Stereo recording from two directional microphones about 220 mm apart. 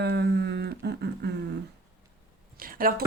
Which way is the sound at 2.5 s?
40° right (ahead or behind).